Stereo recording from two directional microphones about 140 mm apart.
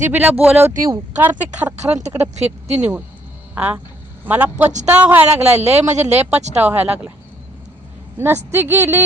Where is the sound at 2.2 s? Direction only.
50° right (ahead or behind).